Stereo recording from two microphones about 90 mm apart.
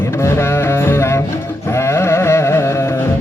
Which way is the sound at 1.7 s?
30° left (ahead or behind).